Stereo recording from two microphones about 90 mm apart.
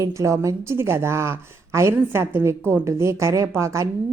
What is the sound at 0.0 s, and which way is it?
A woman's voice, 35° right (ahead or behind).